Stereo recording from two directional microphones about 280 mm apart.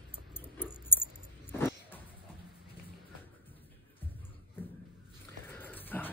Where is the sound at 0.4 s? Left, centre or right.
Centre.